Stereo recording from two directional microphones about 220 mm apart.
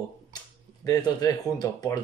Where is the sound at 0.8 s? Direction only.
15° left (ahead or behind).